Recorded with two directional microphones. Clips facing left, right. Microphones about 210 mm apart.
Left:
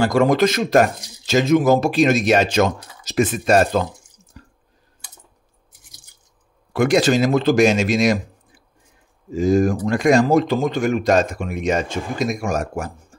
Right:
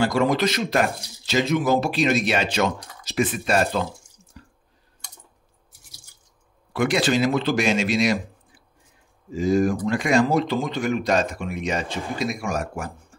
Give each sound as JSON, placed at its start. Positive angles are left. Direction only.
{"t": 0.0, "sound": "speech", "side_deg": 45}
{"t": 4.4, "sound": "squish", "side_deg": 45}
{"t": 6.7, "sound": "speech", "side_deg": 45}
{"t": 9.3, "sound": "speech", "side_deg": 45}